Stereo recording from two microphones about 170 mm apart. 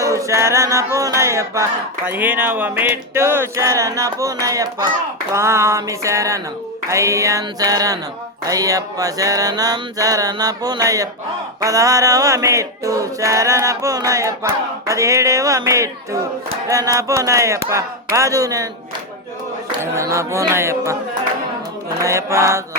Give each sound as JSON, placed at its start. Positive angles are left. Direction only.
{"t": 0.0, "sound": "male singing", "side_deg": -20}
{"t": 0.9, "sound": "music", "side_deg": -20}
{"t": 6.8, "sound": "a sound", "side_deg": -15}
{"t": 16.6, "sound": "music", "side_deg": -20}
{"t": 19.8, "sound": "music", "side_deg": -15}
{"t": 22.0, "sound": "music", "side_deg": -15}